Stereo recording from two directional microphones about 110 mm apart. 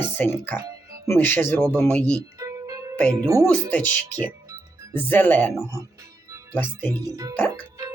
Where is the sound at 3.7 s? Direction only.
15° left (ahead or behind).